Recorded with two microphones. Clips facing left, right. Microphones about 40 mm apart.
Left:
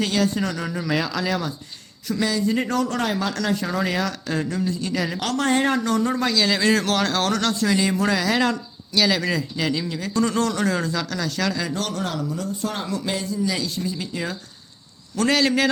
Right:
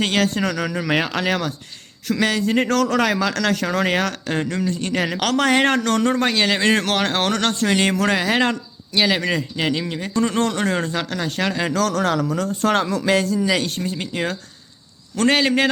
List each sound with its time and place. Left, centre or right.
0.0 s a man's voice: right
5.2 s a man's voice: right
8.1 s speech: right
11.7 s speech: right
13.5 s a man's voice: right
15.4 s speech: right